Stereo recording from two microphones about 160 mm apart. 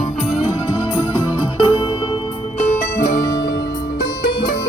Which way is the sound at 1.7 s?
30° left (ahead or behind).